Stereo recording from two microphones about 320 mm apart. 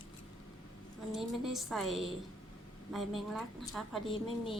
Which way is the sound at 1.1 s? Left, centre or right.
Centre.